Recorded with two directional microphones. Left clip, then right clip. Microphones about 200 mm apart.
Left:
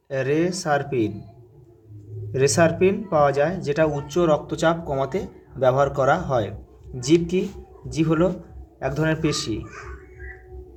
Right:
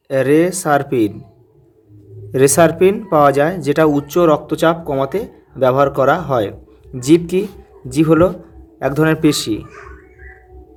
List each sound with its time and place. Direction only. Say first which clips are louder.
0.1 s speech: right 9 dB; 40° right (ahead or behind)
2.3 s speech: right 7 dB; 40° right (ahead or behind)